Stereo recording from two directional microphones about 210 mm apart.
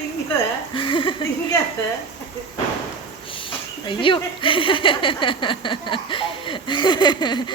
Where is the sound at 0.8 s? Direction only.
25° left (ahead or behind).